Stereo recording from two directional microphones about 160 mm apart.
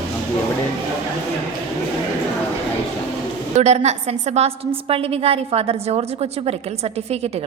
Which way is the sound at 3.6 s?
45° right (ahead or behind).